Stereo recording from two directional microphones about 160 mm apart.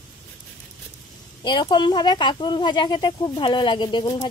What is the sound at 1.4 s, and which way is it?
Speech, 25° left (ahead or behind).